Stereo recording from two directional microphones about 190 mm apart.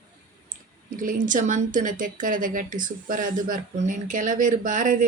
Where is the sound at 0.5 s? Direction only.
45° right (ahead or behind).